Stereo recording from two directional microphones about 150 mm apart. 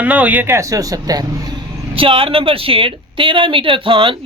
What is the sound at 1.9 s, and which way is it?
Speech, 35° right (ahead or behind).